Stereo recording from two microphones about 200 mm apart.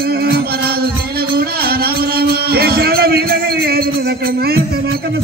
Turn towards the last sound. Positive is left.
turn(degrees=-50)  # may be behind; listen again after turning